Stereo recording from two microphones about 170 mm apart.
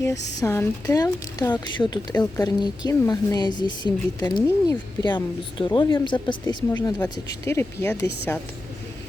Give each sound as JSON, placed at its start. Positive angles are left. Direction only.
{"t": 0.3, "sound": "speech", "side_deg": 15}